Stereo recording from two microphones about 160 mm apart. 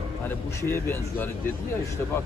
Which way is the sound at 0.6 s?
15° left (ahead or behind).